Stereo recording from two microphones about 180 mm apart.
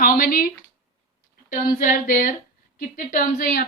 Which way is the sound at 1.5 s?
50° left (ahead or behind).